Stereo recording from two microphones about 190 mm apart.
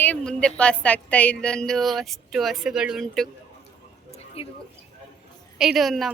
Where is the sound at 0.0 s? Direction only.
5° left (ahead or behind).